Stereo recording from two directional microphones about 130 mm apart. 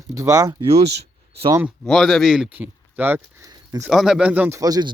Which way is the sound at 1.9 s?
Centre (ahead or behind).